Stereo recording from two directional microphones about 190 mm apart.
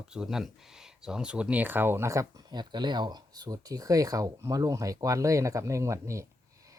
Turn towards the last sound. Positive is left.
turn(degrees=-15)  # may be behind; listen again after turning